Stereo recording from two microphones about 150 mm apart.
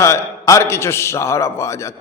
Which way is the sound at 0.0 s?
20° left (ahead or behind).